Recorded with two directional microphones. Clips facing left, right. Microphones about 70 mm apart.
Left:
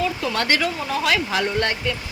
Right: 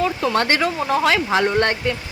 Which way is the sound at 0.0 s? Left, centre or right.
Right.